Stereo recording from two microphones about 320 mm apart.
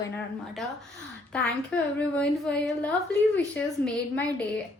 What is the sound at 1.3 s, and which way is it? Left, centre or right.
A woman's voice, centre.